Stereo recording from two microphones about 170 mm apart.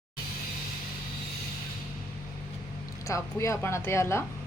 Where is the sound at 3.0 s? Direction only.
15° left (ahead or behind).